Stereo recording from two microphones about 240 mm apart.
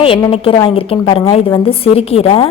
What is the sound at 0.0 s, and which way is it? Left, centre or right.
A woman's voice, left.